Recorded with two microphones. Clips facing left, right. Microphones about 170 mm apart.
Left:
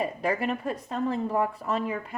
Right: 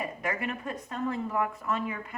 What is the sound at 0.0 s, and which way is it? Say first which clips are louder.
Speech: left 5 dB; 30° left (ahead or behind).